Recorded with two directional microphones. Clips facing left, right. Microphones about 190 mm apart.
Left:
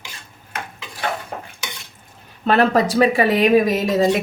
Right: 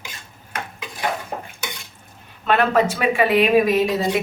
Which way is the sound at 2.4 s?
35° left (ahead or behind).